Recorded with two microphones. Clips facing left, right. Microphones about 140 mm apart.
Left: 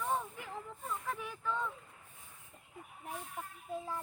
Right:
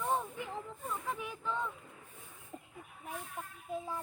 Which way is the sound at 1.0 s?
15° right (ahead or behind).